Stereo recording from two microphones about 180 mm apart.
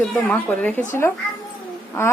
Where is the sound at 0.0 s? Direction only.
5° left (ahead or behind).